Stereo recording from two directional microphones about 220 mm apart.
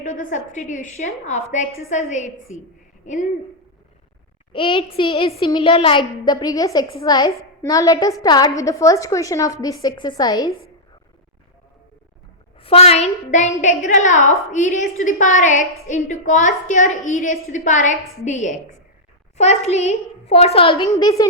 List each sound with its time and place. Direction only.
0.0 s a woman's voice: 35° left (ahead or behind)
4.5 s a woman's voice: 25° left (ahead or behind)
12.5 s a woman's voice: 25° left (ahead or behind)